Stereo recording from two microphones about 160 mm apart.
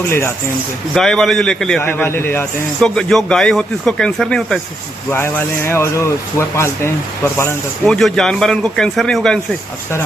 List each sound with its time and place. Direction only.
0.1 s speech: 15° left (ahead or behind)
0.9 s a man's voice: 5° left (ahead or behind)
5.1 s speech: 15° left (ahead or behind)
7.9 s a man's voice: 5° left (ahead or behind)